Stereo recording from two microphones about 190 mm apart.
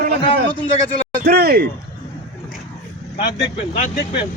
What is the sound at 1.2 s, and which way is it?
Speech, 55° right (ahead or behind).